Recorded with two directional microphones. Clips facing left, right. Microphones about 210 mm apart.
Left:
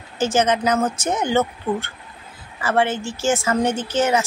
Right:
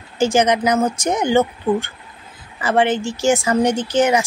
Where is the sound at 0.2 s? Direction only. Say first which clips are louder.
Right 3 dB; 15° right (ahead or behind).